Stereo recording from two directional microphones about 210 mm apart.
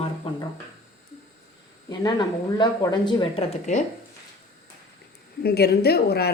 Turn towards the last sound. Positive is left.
turn(degrees=50)  # may be behind; listen again after turning